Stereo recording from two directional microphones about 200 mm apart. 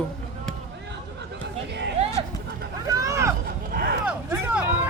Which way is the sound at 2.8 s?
15° right (ahead or behind).